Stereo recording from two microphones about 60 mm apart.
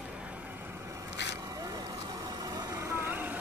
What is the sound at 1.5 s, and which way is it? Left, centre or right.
Vehicle, right.